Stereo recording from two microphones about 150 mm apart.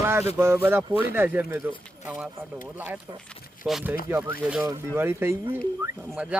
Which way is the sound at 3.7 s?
5° right (ahead or behind).